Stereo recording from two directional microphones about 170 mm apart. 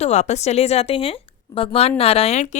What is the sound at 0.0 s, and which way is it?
Speech, 40° left (ahead or behind).